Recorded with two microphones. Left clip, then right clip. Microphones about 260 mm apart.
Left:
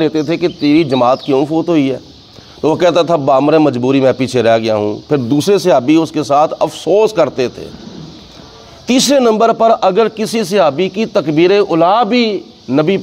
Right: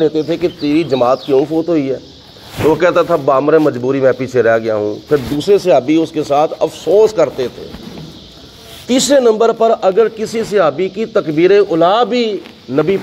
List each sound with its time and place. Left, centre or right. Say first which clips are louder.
0.0 s speech: even; left
8.8 s speech: even; left